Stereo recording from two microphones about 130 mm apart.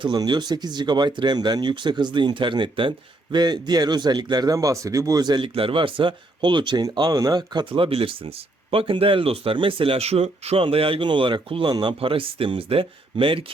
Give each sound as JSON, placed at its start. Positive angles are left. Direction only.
{"t": 0.0, "sound": "speech", "side_deg": -35}